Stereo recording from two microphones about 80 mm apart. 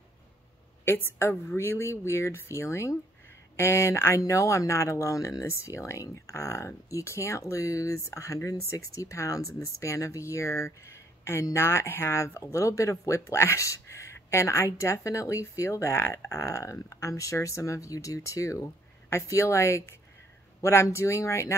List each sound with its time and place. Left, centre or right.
0.8 s speech: left